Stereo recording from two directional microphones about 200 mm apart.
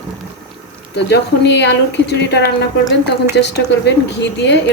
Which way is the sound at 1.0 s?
60° left (ahead or behind).